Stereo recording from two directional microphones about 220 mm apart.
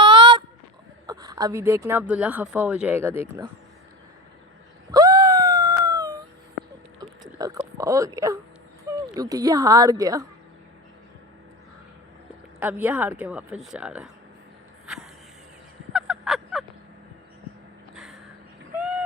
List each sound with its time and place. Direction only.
0.0 s honk: 20° right (ahead or behind)
1.0 s speech: 15° right (ahead or behind)
4.9 s wail: 15° right (ahead or behind)
7.0 s a sound: 15° right (ahead or behind)
8.9 s speech: 15° right (ahead or behind)
12.5 s speech: 10° right (ahead or behind)
15.9 s a sound: centre (ahead or behind)
18.8 s vehicle: 5° right (ahead or behind)